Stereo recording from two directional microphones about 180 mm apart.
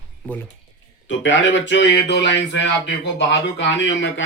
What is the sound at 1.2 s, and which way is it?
A man's voice, 90° left.